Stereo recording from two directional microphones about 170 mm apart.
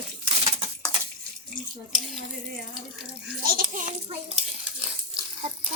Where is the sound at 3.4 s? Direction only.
55° right (ahead or behind).